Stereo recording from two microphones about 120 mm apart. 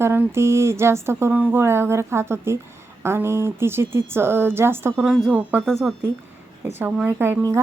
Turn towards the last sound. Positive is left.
turn(degrees=-20)  # may be behind; listen again after turning